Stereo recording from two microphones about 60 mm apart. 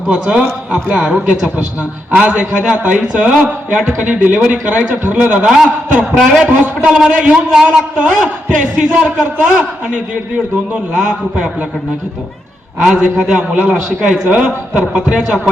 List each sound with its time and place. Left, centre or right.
0.1 s a man's voice: centre
7.3 s a man's voice: centre
10.9 s a man's voice: centre
12.8 s a man's voice: centre